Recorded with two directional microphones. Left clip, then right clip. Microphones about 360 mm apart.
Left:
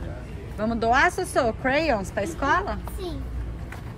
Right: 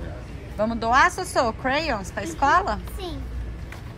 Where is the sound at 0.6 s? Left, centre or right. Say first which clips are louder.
Right 2 dB; centre.